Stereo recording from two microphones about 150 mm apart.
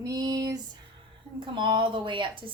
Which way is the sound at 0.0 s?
25° right (ahead or behind).